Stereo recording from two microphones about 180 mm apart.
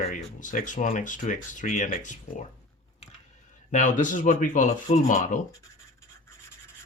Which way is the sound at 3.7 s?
45° left (ahead or behind).